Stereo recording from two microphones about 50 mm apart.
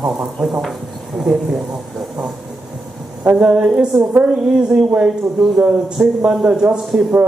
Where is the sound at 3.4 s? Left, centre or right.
Right.